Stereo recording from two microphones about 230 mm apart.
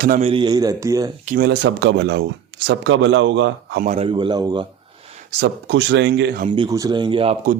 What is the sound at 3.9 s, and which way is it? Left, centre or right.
Speech, right.